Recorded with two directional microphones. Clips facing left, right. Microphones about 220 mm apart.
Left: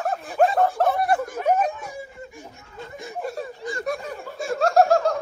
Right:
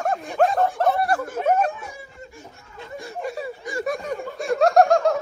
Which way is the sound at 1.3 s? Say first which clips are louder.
Right 1 dB; 10° left (ahead or behind).